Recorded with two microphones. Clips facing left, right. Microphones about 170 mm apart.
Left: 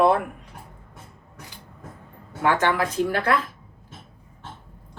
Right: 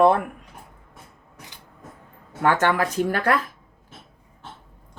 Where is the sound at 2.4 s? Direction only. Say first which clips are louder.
Right 1 dB; 45° right (ahead or behind).